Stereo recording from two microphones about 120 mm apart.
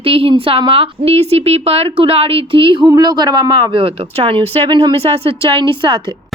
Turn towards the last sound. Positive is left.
turn(degrees=-45)  # may be behind; listen again after turning